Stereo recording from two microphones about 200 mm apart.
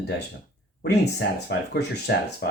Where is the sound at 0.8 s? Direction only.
55° left (ahead or behind).